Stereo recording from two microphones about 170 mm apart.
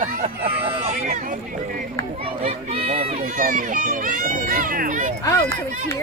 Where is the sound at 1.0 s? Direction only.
50° right (ahead or behind).